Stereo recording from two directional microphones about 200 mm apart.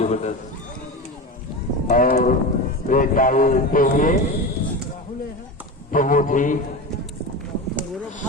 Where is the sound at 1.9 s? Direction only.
40° left (ahead or behind).